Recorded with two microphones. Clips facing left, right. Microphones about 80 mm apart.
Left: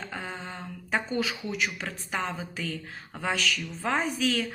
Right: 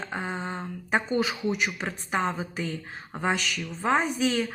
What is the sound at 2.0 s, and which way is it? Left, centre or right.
Speech, right.